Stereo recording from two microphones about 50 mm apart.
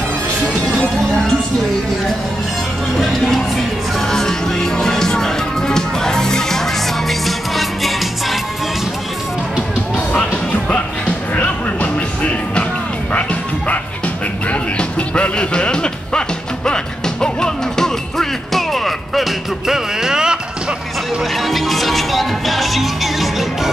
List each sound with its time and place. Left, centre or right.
3.0 s music: centre
10.1 s music: left; by 20.3 s centre
21.2 s music: centre